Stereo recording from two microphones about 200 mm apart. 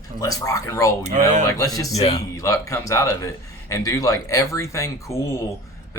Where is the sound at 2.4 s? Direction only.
15° left (ahead or behind).